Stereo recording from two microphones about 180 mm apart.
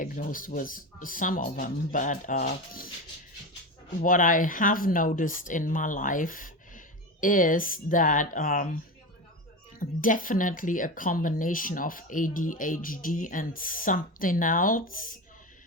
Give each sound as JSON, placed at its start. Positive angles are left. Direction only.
{"t": 0.0, "sound": "speech", "side_deg": 50}
{"t": 4.0, "sound": "speech", "side_deg": 50}
{"t": 9.8, "sound": "speech", "side_deg": 50}